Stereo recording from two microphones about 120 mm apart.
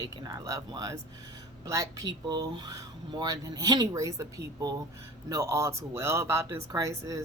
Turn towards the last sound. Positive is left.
turn(degrees=-30)  # may be behind; listen again after turning